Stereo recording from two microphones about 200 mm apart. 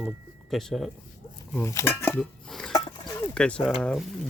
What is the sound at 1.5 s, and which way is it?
Speech, 10° left (ahead or behind).